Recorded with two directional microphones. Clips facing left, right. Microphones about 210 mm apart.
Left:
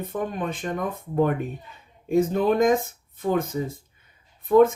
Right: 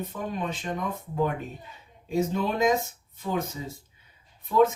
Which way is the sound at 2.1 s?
50° left (ahead or behind).